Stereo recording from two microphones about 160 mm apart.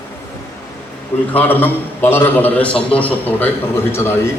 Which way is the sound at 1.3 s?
10° left (ahead or behind).